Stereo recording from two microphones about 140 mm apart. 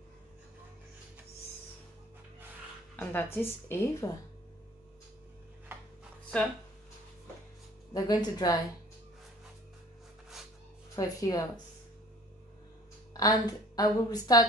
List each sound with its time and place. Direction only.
3.0 s a woman's voice: 15° left (ahead or behind)
5.7 s a sound: 15° right (ahead or behind)
7.9 s a woman's voice: 30° left (ahead or behind)
11.0 s a woman's voice: 25° left (ahead or behind)
13.1 s a woman's voice: 25° left (ahead or behind)